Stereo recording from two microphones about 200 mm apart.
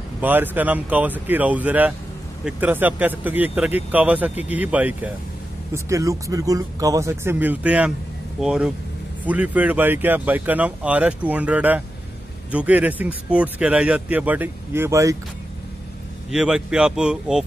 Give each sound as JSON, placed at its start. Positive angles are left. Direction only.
{"t": 0.2, "sound": "speech", "side_deg": -10}
{"t": 16.3, "sound": "speech", "side_deg": -5}